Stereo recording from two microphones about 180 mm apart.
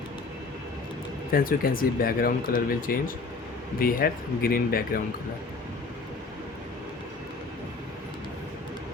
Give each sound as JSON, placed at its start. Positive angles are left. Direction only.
{"t": 1.3, "sound": "speech", "side_deg": 55}